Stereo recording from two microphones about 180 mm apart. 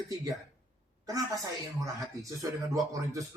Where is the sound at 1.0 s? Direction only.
20° right (ahead or behind).